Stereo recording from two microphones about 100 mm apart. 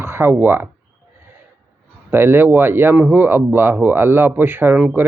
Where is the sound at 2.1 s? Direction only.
20° right (ahead or behind).